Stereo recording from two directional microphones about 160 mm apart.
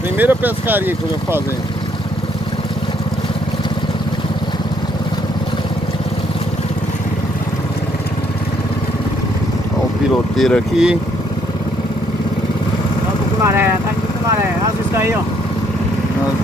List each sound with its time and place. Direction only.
0.2 s speech: 10° right (ahead or behind)
10.3 s speech: centre (ahead or behind)
13.4 s vehicle: 15° right (ahead or behind)